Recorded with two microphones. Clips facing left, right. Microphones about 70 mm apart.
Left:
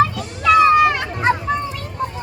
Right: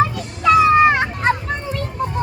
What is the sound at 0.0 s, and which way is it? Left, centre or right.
Children playing, right.